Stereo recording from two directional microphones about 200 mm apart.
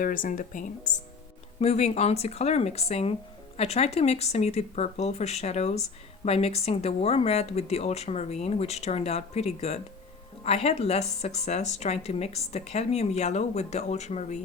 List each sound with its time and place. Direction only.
0.0 s speech: 45° left (ahead or behind)